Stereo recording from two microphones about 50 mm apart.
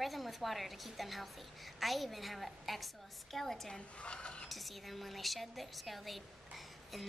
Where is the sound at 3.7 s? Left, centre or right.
Left.